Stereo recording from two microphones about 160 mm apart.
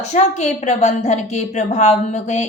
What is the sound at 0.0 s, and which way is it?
A woman's voice, 45° left (ahead or behind).